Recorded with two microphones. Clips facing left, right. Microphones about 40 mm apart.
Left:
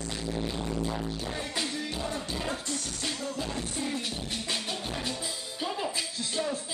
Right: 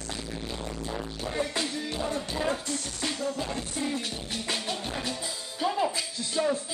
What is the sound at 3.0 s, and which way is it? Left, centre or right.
Music, centre.